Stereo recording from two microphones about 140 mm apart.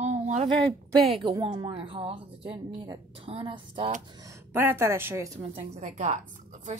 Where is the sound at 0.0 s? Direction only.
50° right (ahead or behind).